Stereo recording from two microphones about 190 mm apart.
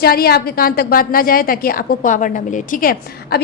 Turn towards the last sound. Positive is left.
turn(degrees=50)  # may be behind; listen again after turning